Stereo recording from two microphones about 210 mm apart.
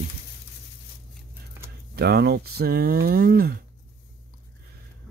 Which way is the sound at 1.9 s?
50° right (ahead or behind).